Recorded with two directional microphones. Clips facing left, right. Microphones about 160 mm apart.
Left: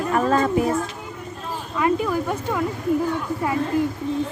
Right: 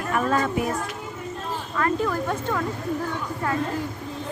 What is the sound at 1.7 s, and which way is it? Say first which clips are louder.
Speech: left 3 dB; 10° left (ahead or behind).